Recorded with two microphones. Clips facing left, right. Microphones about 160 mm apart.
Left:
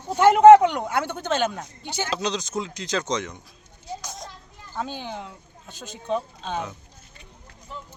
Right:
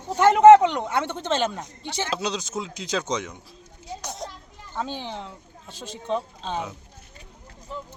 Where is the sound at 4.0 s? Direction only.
65° right (ahead or behind).